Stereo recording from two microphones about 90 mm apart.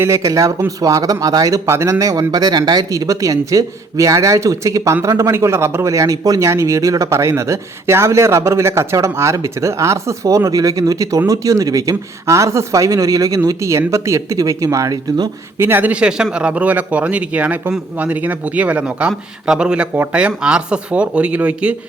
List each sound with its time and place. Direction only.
0.0 s speech: 35° right (ahead or behind)
15.5 s speech: 25° right (ahead or behind)